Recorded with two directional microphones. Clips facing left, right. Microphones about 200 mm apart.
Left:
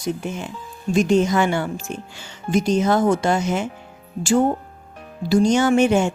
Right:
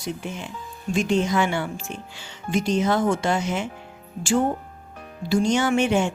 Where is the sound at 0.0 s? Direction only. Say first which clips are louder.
Left 5 dB; 45° left (ahead or behind).